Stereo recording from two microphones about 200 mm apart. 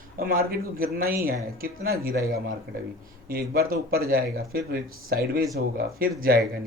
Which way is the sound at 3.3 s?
50° right (ahead or behind).